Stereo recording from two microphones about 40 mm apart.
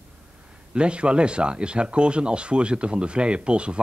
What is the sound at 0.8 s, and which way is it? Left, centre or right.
Speech, right.